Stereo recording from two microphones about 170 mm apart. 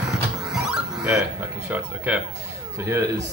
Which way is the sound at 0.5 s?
Centre (ahead or behind).